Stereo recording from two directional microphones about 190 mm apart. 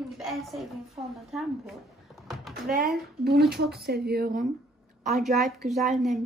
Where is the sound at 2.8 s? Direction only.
55° right (ahead or behind).